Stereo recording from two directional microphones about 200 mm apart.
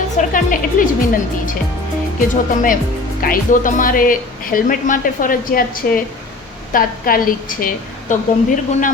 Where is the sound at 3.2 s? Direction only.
45° left (ahead or behind).